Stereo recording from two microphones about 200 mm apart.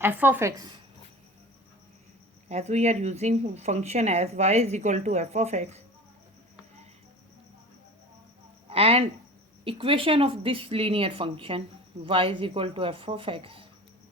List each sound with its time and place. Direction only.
0.0 s a woman's voice: 10° right (ahead or behind)
2.5 s speech: 35° right (ahead or behind)
8.7 s speech: 30° right (ahead or behind)